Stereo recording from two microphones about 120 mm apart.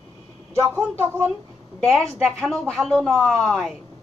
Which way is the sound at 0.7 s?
15° right (ahead or behind).